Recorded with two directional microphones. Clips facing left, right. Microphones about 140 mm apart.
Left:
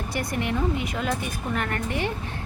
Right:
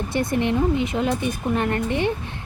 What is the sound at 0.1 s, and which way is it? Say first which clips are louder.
A woman's voice: right 6 dB; 25° right (ahead or behind).